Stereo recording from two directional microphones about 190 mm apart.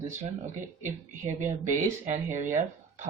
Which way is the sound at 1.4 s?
40° right (ahead or behind).